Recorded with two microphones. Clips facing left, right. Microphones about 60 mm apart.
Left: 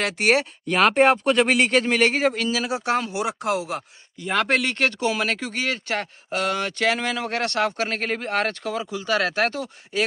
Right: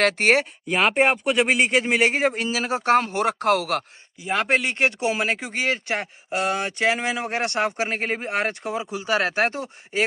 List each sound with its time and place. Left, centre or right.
0.0 s speech: right
0.7 s speech: centre
2.1 s speech: right
4.2 s speech: centre; by 10.0 s right